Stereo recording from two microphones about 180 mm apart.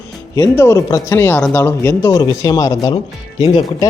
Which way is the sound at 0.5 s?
15° left (ahead or behind).